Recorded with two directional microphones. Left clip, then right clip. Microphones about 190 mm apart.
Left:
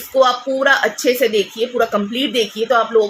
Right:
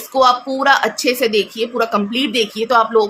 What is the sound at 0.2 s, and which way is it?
Speech, 15° right (ahead or behind).